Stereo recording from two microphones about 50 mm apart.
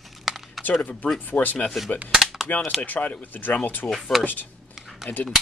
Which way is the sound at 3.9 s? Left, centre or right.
Centre.